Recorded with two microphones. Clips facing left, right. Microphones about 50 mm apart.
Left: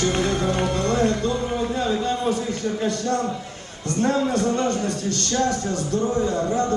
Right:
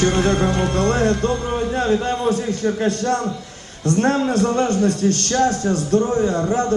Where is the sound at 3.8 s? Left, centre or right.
Right.